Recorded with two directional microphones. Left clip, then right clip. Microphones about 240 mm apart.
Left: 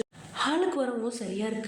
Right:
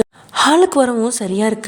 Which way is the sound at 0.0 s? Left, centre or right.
Right.